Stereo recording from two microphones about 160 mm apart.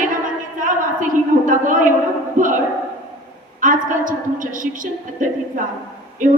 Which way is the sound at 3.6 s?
55° right (ahead or behind).